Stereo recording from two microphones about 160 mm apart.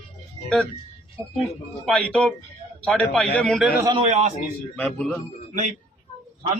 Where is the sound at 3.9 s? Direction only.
40° right (ahead or behind).